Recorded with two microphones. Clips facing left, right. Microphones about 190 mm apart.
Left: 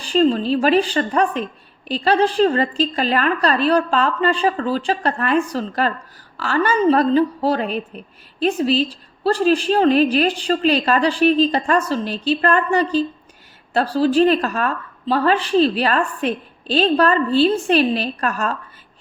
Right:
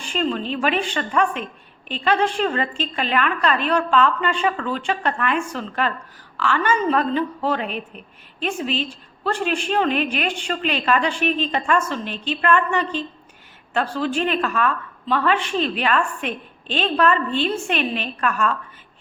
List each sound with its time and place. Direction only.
0.0 s a woman's voice: 35° left (ahead or behind)